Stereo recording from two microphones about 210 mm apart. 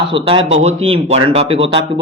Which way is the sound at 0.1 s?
25° right (ahead or behind).